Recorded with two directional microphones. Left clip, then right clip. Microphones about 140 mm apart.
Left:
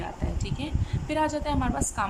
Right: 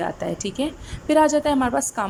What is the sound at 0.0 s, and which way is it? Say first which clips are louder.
A woman's voice: right 10 dB; 45° right (ahead or behind).